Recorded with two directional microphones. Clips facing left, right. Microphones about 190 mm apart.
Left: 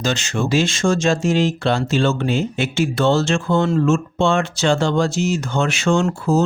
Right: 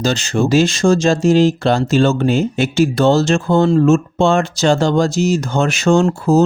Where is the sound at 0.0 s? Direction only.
35° right (ahead or behind).